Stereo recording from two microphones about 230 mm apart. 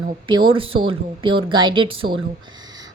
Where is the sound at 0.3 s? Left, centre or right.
Right.